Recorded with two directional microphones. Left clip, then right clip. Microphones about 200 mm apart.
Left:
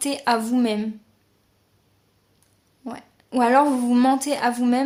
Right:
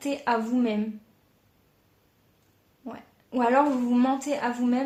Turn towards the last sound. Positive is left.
turn(degrees=30)  # may be behind; listen again after turning